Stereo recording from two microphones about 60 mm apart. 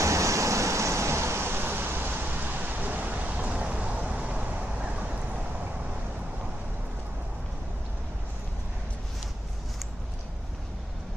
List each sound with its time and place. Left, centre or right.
0.0 s vehicle: right